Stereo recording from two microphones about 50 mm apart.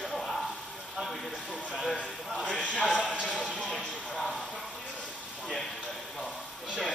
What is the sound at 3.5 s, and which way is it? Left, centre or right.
Music, centre.